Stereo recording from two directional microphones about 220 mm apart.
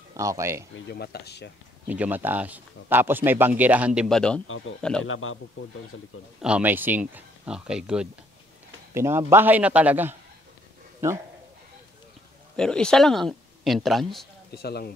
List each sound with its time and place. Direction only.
0.1 s speech: 15° right (ahead or behind)
0.7 s speech: 50° left (ahead or behind)
1.9 s speech: 10° right (ahead or behind)
5.0 s a man's voice: 65° left (ahead or behind)
6.4 s speech: 5° right (ahead or behind)
12.5 s speech: 5° left (ahead or behind)
14.5 s speech: 45° left (ahead or behind)